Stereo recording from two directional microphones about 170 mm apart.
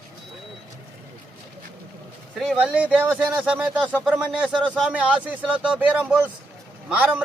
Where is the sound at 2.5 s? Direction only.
5° right (ahead or behind).